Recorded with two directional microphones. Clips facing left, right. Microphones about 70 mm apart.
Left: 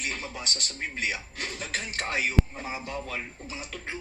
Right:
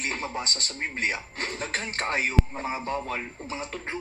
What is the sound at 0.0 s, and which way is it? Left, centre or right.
Speech, right.